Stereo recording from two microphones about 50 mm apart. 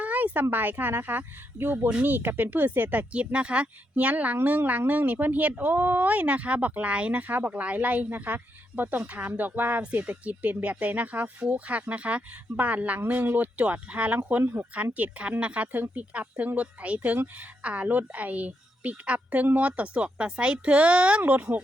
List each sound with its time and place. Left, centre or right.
0.0 s a sound: right
0.5 s speech: right
14.4 s speech: right
14.9 s speech: right